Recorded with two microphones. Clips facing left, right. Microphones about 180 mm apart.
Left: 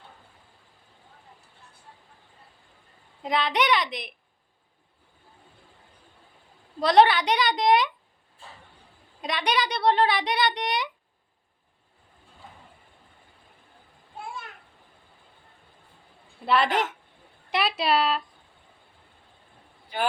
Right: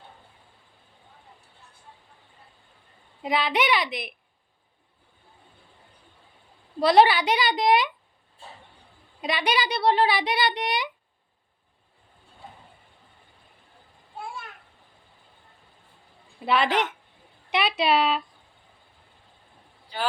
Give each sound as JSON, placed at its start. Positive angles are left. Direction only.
{"t": 3.2, "sound": "a child's voice", "side_deg": -5}
{"t": 6.7, "sound": "a child's voice", "side_deg": -5}
{"t": 9.2, "sound": "a child's voice", "side_deg": -5}
{"t": 16.5, "sound": "a child's voice", "side_deg": 0}